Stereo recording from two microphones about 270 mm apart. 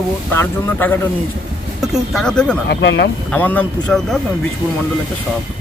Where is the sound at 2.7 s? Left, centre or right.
Left.